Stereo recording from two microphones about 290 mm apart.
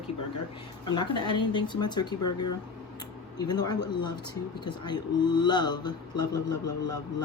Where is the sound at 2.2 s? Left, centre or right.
Left.